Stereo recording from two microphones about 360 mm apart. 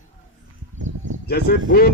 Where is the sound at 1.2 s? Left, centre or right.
Left.